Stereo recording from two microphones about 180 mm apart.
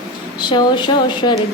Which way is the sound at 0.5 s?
25° left (ahead or behind).